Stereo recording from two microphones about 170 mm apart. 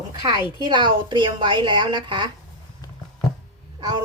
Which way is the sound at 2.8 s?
20° left (ahead or behind).